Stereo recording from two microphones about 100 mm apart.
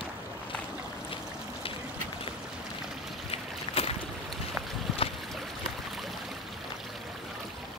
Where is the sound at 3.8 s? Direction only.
75° left (ahead or behind).